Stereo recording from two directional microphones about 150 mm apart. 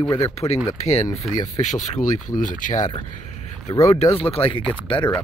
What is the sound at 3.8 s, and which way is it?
Speech, 45° left (ahead or behind).